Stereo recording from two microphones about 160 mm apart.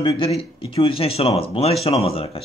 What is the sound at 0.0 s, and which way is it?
Speech, 35° left (ahead or behind).